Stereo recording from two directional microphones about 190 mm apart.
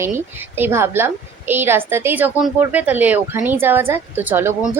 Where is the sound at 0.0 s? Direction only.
10° right (ahead or behind).